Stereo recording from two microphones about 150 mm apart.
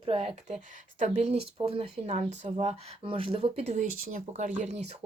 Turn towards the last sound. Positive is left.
turn(degrees=-50)  # may be behind; listen again after turning